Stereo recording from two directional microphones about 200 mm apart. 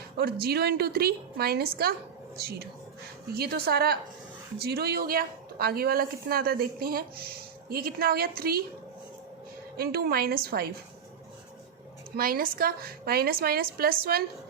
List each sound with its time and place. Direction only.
0.2 s a woman's voice: 50° right (ahead or behind)
9.7 s a woman's voice: 50° right (ahead or behind)
12.1 s a woman's voice: 45° right (ahead or behind)